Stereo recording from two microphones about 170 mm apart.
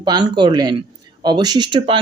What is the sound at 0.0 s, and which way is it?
Speech, 25° right (ahead or behind).